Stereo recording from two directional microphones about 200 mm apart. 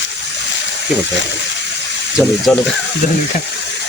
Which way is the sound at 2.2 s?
5° right (ahead or behind).